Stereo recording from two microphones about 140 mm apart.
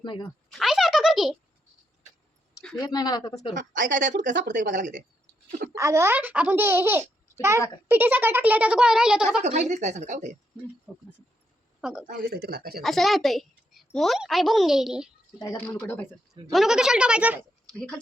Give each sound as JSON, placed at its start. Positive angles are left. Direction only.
{"t": 0.0, "sound": "speech", "side_deg": 35}
{"t": 0.5, "sound": "a sound", "side_deg": 0}
{"t": 2.7, "sound": "speech", "side_deg": 30}
{"t": 3.7, "sound": "a woman's voice", "side_deg": -65}
{"t": 5.7, "sound": "a child's voice", "side_deg": -20}
{"t": 9.4, "sound": "a woman's voice", "side_deg": -55}
{"t": 10.9, "sound": "a woman's voice", "side_deg": 0}
{"t": 12.0, "sound": "speech", "side_deg": -80}
{"t": 12.8, "sound": "a woman's voice", "side_deg": 0}
{"t": 15.5, "sound": "speech", "side_deg": 10}
{"t": 16.5, "sound": "a woman's voice", "side_deg": -5}
{"t": 17.7, "sound": "speech", "side_deg": 5}